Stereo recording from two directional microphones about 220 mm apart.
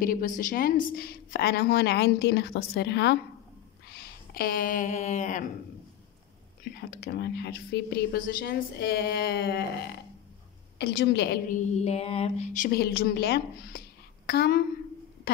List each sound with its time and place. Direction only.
0.0 s a woman's voice: 40° left (ahead or behind)
6.7 s a woman's voice: 45° left (ahead or behind)